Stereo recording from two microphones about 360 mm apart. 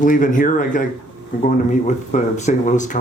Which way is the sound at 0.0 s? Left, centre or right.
Left.